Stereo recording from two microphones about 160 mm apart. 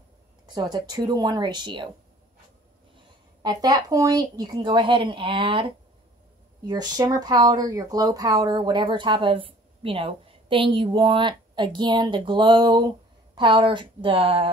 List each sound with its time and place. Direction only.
0.5 s speech: 25° right (ahead or behind)
3.4 s speech: 25° right (ahead or behind)
6.7 s a woman's voice: 25° right (ahead or behind)